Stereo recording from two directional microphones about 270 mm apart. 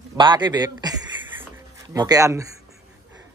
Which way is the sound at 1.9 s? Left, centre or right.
Centre.